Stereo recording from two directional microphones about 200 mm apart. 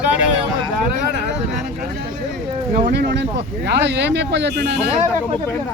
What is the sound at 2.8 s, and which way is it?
Speech, 55° right (ahead or behind).